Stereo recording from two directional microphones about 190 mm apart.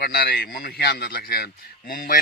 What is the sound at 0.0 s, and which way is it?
Speech, 55° left (ahead or behind).